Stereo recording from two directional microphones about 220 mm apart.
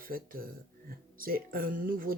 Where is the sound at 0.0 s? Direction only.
40° right (ahead or behind).